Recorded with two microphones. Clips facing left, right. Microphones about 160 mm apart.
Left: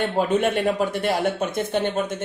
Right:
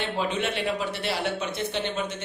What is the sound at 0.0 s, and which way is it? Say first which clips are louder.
Speech: left 7 dB; 50° left (ahead or behind).